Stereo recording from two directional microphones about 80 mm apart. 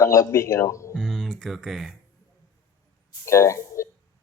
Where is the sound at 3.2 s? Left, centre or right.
Left.